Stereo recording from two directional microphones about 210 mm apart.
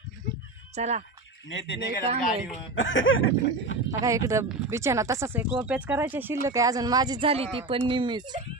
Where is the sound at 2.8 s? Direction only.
65° left (ahead or behind).